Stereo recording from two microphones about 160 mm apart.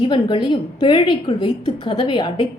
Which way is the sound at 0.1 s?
30° left (ahead or behind).